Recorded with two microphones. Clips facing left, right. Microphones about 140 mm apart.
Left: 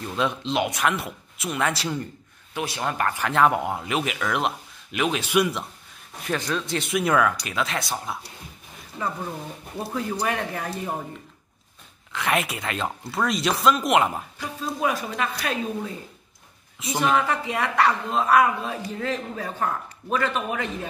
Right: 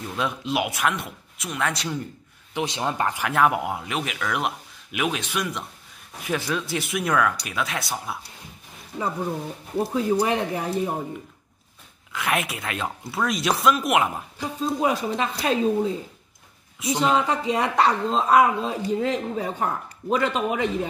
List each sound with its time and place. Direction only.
0.1 s speech: centre (ahead or behind)
2.5 s speech: 20° right (ahead or behind); by 5.2 s 5° right (ahead or behind)
5.2 s a man's voice: 10° left (ahead or behind)
6.2 s speech: 10° right (ahead or behind)
8.9 s speech: 15° right (ahead or behind)
12.1 s speech: centre (ahead or behind)
14.4 s speech: 20° right (ahead or behind)
17.0 s speech: 20° right (ahead or behind)